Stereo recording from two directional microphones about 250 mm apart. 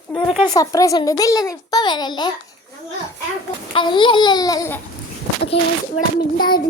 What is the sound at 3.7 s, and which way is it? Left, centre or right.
A child's voice, centre.